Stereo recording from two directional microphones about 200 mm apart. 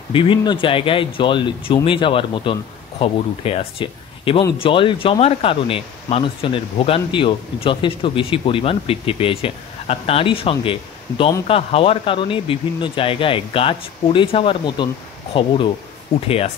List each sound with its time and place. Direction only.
0.1 s speech: 25° left (ahead or behind)